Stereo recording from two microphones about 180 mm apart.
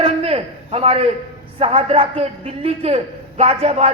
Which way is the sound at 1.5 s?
30° right (ahead or behind).